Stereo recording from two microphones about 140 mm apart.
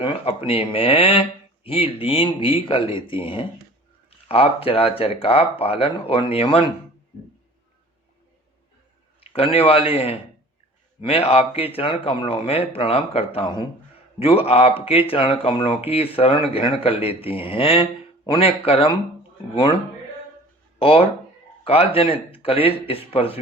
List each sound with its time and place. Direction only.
0.0 s speech: 45° left (ahead or behind)
9.2 s speech: 45° left (ahead or behind)